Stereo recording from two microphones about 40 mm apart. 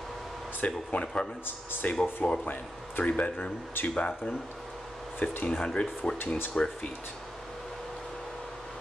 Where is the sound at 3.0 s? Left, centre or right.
Left.